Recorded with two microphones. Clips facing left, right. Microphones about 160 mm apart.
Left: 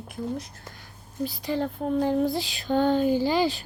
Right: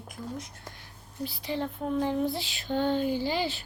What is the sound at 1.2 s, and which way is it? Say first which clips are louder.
Speech: left 5 dB; 45° left (ahead or behind).